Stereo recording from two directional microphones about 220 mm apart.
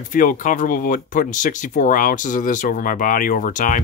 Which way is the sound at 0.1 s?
35° left (ahead or behind).